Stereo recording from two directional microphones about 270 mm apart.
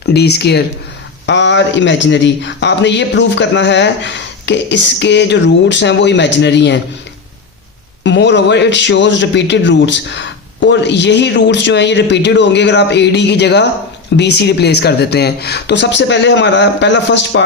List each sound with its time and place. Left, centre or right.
0.1 s speech: left
8.0 s speech: left